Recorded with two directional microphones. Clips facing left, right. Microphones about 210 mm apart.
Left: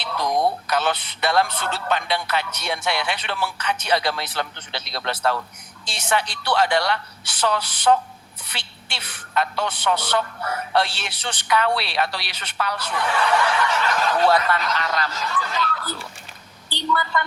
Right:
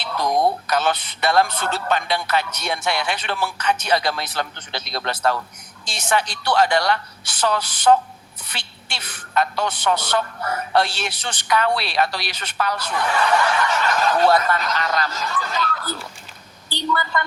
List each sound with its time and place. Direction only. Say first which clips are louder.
0.7 s a woman's voice: right 2 dB; 45° right (ahead or behind)